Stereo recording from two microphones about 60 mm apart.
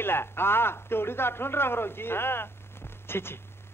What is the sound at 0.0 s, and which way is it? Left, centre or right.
A man's voice, left.